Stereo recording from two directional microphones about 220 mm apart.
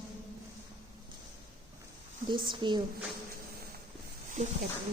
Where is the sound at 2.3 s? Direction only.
20° right (ahead or behind).